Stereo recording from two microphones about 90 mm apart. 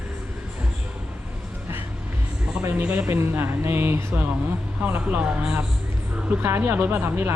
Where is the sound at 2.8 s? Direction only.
20° right (ahead or behind).